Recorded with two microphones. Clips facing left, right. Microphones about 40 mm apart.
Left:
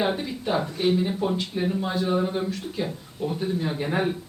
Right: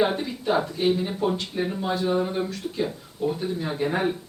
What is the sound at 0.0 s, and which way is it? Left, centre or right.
A man's voice, centre.